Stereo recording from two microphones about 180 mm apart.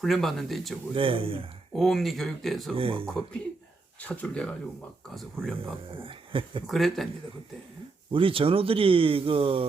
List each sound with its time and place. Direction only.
0.0 s speech: centre (ahead or behind)
0.9 s speech: 30° right (ahead or behind)
1.7 s speech: centre (ahead or behind)
2.7 s speech: 30° right (ahead or behind)
4.0 s speech: 10° left (ahead or behind)
5.9 s speech: 30° right (ahead or behind)
6.7 s speech: centre (ahead or behind)
8.1 s speech: 30° right (ahead or behind)